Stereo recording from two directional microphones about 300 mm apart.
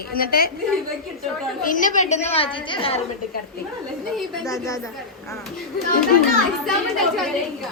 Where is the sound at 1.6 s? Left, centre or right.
Left.